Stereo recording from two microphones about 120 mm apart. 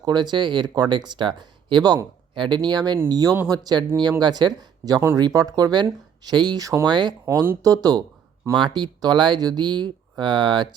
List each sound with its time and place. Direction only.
0.0 s speech: 35° right (ahead or behind)
7.3 s speech: 20° right (ahead or behind)
7.6 s speech: 30° right (ahead or behind)